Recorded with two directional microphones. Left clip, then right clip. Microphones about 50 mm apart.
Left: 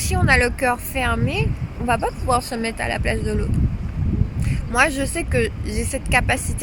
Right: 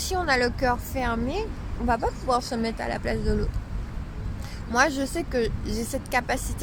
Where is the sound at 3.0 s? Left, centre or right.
Right.